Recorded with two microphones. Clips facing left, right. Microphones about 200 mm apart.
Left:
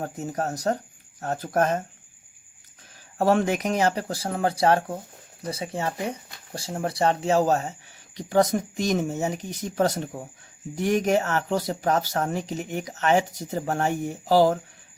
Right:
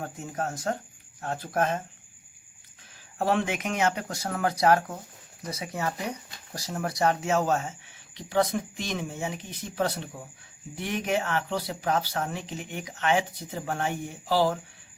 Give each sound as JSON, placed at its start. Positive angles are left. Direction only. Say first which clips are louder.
{"t": 0.0, "sound": "speech", "louder": "left 4 dB", "side_deg": 40}
{"t": 3.2, "sound": "speech", "louder": "left 5 dB", "side_deg": 45}